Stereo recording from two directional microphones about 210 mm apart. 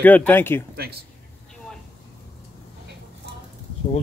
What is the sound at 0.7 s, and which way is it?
Speech, 50° right (ahead or behind).